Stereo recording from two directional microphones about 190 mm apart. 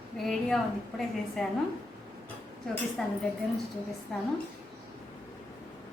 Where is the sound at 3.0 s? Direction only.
Centre (ahead or behind).